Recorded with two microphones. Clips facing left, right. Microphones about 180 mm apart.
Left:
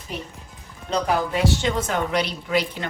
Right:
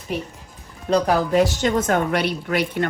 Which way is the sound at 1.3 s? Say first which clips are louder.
Right 4 dB; 45° right (ahead or behind).